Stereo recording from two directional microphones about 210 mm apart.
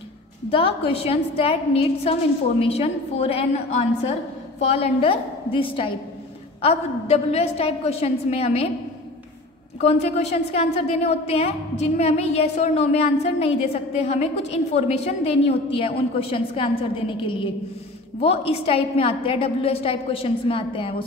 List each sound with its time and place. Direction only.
0.5 s a woman's voice: 25° left (ahead or behind)
9.8 s a woman's voice: 30° left (ahead or behind)